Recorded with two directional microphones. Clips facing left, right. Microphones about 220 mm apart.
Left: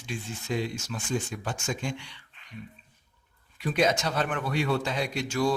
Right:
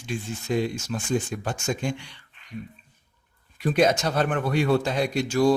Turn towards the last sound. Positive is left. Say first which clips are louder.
# right 6 dB
turn(degrees=-40)  # may be behind; listen again after turning